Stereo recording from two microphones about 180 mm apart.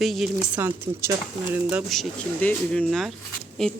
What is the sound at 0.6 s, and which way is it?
Speech, 15° right (ahead or behind).